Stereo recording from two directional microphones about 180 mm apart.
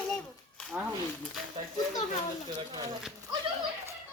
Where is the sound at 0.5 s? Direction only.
Centre (ahead or behind).